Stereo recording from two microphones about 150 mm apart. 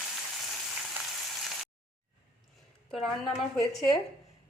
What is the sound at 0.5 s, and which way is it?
Frying, centre (ahead or behind).